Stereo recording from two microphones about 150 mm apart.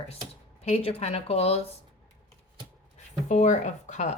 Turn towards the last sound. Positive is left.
turn(degrees=50)  # may be behind; listen again after turning